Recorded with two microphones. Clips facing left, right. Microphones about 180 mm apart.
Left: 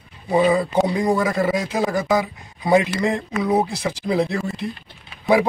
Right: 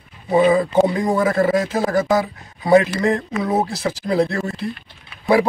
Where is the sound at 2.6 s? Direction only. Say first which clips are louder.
Right 3 dB; 15° left (ahead or behind).